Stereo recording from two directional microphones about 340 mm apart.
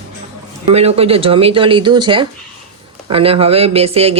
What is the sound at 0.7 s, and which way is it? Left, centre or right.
Speech, centre.